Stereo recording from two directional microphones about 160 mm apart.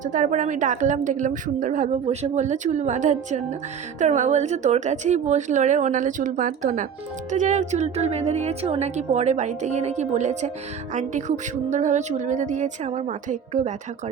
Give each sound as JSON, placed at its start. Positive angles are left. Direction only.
{"t": 0.0, "sound": "a woman's voice", "side_deg": -55}